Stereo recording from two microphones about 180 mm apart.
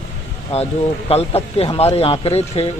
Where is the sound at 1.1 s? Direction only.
35° left (ahead or behind).